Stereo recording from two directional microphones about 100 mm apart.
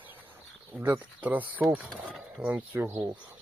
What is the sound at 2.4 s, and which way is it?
Speech, 15° right (ahead or behind).